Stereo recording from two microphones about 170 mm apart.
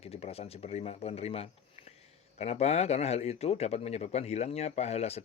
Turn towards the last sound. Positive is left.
turn(degrees=40)  # may be behind; listen again after turning